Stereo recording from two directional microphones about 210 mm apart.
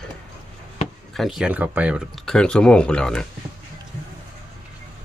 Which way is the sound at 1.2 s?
Centre (ahead or behind).